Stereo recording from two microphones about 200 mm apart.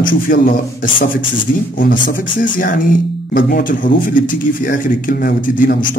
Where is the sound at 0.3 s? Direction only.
45° left (ahead or behind).